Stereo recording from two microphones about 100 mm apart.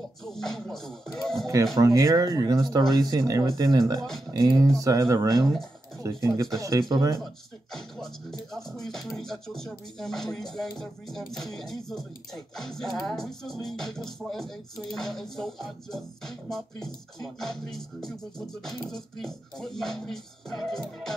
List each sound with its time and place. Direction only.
0.2 s music: 5° left (ahead or behind)
1.8 s speech: 35° right (ahead or behind)
7.7 s music: 5° left (ahead or behind)